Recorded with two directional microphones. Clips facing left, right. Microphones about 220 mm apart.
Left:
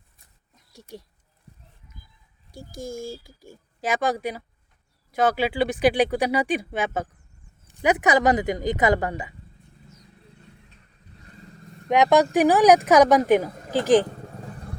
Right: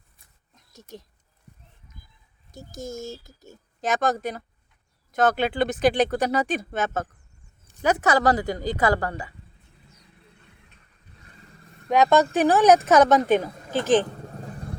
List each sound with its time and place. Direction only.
0.5 s a sound: 10° left (ahead or behind)
2.5 s speech: 10° left (ahead or behind)
11.9 s speech: 15° left (ahead or behind)